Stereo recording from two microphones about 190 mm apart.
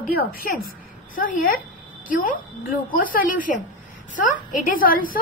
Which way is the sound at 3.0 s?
45° left (ahead or behind).